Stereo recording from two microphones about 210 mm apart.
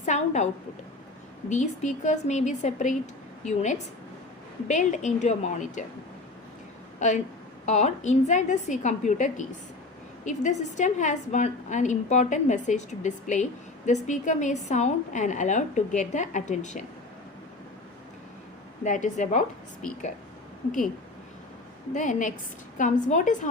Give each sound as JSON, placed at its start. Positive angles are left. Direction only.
{"t": 0.0, "sound": "a sound", "side_deg": 35}
{"t": 1.5, "sound": "a woman's voice", "side_deg": 35}
{"t": 7.0, "sound": "a woman's voice", "side_deg": 35}
{"t": 18.9, "sound": "a woman's voice", "side_deg": 35}
{"t": 21.9, "sound": "a woman's voice", "side_deg": 35}